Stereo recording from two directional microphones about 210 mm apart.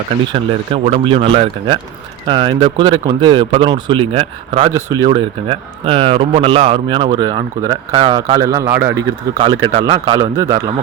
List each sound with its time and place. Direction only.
0.3 s speech: 25° right (ahead or behind)
4.7 s a man's voice: 15° right (ahead or behind)